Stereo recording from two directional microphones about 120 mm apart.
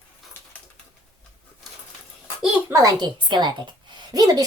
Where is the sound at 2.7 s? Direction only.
35° right (ahead or behind).